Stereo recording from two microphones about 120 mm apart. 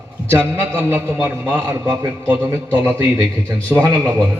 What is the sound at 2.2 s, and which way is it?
A man's voice, 20° right (ahead or behind).